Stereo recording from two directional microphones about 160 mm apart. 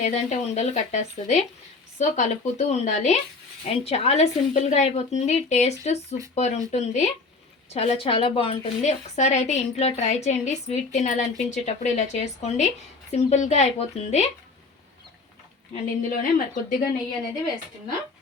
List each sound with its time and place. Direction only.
0.0 s a woman's voice: 45° left (ahead or behind)
15.7 s a woman's voice: 55° left (ahead or behind)